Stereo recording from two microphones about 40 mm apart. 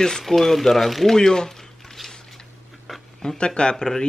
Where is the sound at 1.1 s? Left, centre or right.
Centre.